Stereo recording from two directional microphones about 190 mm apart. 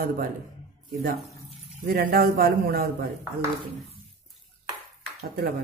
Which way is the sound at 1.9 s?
50° right (ahead or behind).